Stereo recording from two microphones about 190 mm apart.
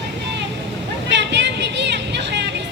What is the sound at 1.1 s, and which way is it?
Vehicle, 65° right (ahead or behind).